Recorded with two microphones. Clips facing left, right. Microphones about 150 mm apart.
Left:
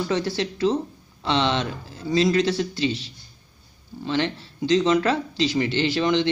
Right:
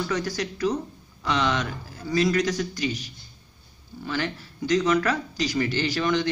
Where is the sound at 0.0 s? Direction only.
25° left (ahead or behind).